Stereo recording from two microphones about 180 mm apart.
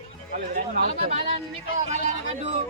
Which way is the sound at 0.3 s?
45° right (ahead or behind).